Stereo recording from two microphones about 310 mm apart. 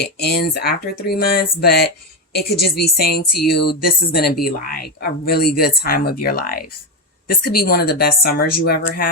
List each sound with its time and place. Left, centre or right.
0.0 s speech: left